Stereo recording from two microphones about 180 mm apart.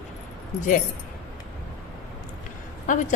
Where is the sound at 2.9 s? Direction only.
45° left (ahead or behind).